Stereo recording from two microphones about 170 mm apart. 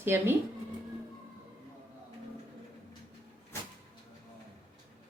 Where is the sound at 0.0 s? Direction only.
15° right (ahead or behind).